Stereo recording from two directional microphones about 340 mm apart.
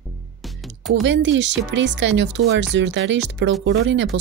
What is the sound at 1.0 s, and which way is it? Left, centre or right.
Speech, right.